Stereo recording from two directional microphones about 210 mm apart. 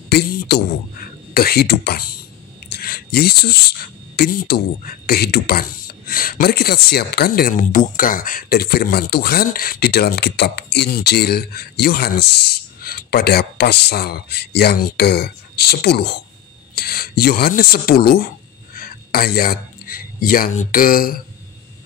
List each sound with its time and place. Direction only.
0.1 s speech: 50° left (ahead or behind)